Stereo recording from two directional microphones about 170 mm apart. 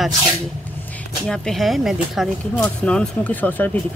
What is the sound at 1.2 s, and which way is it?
Speech, 5° left (ahead or behind).